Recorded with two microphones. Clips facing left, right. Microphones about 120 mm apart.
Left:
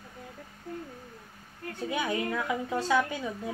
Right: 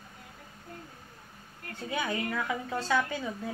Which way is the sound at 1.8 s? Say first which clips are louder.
Left 2 dB; 15° left (ahead or behind).